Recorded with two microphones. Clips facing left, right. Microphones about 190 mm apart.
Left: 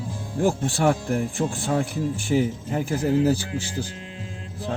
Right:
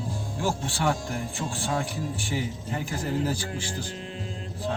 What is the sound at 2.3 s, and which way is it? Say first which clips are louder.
Speech: left 9 dB; 45° left (ahead or behind).